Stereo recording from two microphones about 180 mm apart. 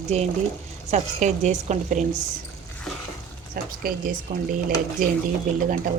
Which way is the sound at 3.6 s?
55° right (ahead or behind).